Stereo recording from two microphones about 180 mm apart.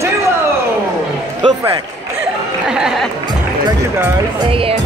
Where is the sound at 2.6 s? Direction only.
5° right (ahead or behind).